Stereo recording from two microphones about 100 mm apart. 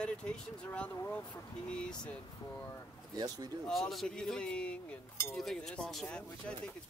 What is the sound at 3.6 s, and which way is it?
Speech, 5° left (ahead or behind).